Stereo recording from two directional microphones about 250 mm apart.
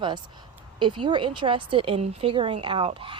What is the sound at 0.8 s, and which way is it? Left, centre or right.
Speech, centre.